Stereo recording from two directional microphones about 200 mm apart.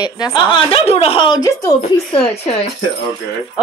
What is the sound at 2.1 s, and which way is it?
Speech, 30° left (ahead or behind).